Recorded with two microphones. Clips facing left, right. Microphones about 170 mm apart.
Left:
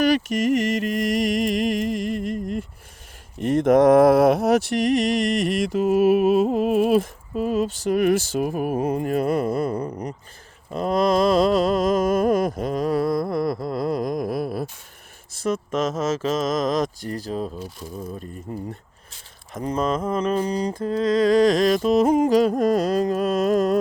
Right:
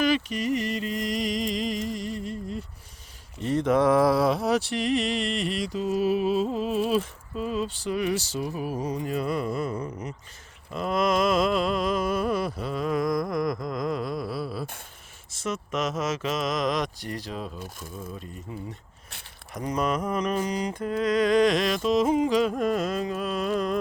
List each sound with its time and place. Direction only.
0.0 s mantra: 40° left (ahead or behind)
0.5 s mantra: 90° left; by 1.0 s 70° left (ahead or behind)
1.2 s music: 50° left (ahead or behind); by 2.6 s 70° left (ahead or behind)
3.4 s mantra: 50° left (ahead or behind)
15.5 s speech: 30° left (ahead or behind)
16.4 s mantra: 45° left (ahead or behind)
19.5 s mantra: 30° left (ahead or behind)